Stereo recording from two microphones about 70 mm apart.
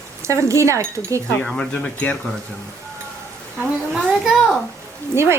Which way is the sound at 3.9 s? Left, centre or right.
Centre.